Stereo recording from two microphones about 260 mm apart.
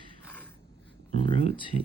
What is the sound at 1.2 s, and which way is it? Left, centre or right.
Speech, left.